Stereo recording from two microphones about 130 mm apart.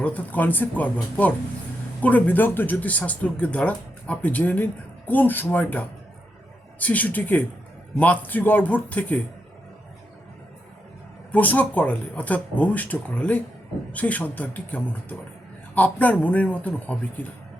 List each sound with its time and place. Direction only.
0.0 s speech: 10° left (ahead or behind)
2.0 s speech: 10° left (ahead or behind)
11.3 s speech: 10° left (ahead or behind)